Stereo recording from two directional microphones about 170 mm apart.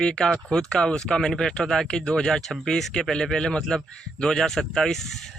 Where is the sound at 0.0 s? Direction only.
5° left (ahead or behind).